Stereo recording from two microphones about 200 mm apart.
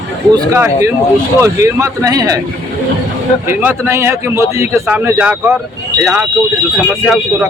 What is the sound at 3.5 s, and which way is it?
A man's voice, 10° right (ahead or behind).